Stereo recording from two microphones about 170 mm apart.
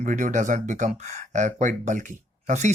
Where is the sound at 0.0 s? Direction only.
50° right (ahead or behind).